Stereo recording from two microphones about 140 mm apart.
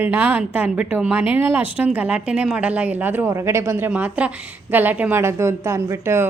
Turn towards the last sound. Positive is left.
turn(degrees=-20)  # may be behind; listen again after turning